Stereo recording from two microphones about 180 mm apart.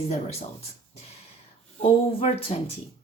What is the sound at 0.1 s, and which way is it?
Speech, 35° left (ahead or behind).